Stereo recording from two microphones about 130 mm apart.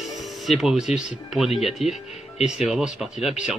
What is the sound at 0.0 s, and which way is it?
Speech, centre (ahead or behind).